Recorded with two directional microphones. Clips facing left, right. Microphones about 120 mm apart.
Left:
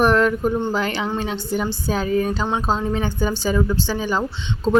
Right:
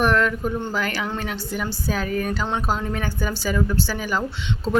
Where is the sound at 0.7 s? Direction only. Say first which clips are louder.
Left 3 dB; 30° left (ahead or behind).